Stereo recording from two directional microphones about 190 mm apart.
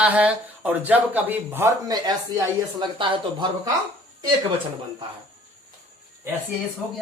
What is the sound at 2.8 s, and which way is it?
Speech, 25° right (ahead or behind).